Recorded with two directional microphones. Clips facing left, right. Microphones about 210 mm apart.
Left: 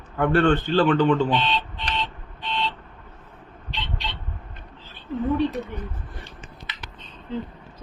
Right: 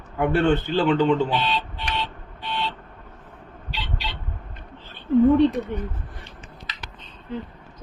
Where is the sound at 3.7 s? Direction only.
5° right (ahead or behind).